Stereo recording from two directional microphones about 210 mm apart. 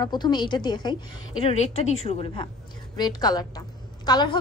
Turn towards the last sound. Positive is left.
turn(degrees=20)  # may be behind; listen again after turning